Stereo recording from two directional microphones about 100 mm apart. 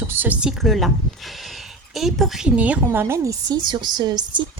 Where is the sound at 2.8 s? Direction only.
25° right (ahead or behind); by 4.5 s 45° right (ahead or behind).